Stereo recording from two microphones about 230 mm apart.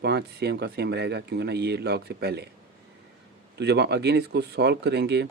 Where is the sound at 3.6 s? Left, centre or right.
Right.